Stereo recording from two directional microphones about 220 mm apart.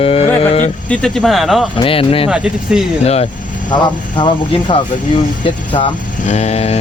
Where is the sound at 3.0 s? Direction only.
30° left (ahead or behind).